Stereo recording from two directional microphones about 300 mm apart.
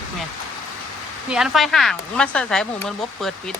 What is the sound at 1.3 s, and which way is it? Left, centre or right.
Speech, centre.